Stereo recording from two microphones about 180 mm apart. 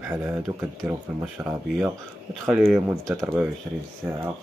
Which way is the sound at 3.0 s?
20° right (ahead or behind).